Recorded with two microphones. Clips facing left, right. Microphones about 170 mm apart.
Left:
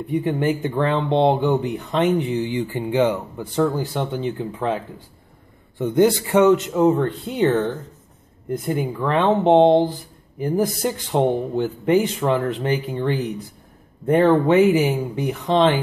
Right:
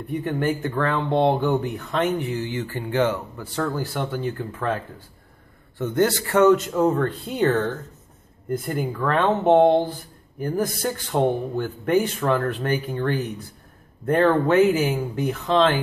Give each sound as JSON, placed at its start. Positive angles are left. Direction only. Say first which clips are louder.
{"t": 0.1, "sound": "speech", "louder": "left 3 dB", "side_deg": 20}
{"t": 8.5, "sound": "speech", "louder": "left 2 dB", "side_deg": 0}
{"t": 8.9, "sound": "speech", "louder": "left 2 dB", "side_deg": 20}